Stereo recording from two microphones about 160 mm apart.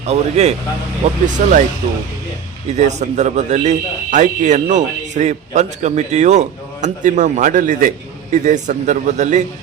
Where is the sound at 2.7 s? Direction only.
45° right (ahead or behind).